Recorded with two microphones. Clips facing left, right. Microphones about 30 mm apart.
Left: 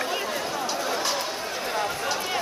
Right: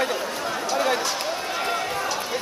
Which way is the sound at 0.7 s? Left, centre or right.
Right.